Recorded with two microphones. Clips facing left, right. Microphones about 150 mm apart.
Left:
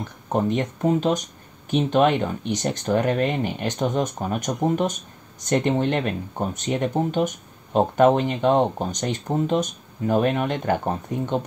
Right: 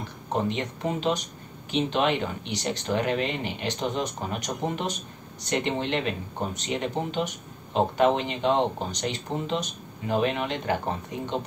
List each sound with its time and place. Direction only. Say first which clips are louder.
0.3 s speech: left 5 dB; 45° left (ahead or behind)